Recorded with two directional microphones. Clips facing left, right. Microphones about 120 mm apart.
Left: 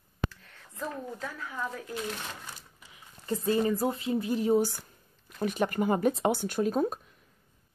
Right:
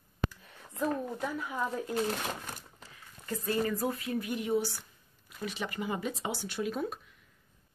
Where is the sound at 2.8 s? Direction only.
20° left (ahead or behind).